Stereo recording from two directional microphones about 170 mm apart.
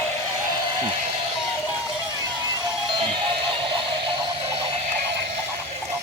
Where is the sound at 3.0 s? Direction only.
30° right (ahead or behind).